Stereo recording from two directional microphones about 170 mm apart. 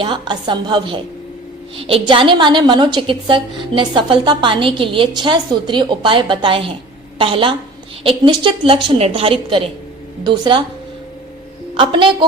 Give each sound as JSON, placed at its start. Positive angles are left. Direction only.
{"t": 0.0, "sound": "a woman's voice", "side_deg": -30}
{"t": 11.8, "sound": "a woman's voice", "side_deg": -30}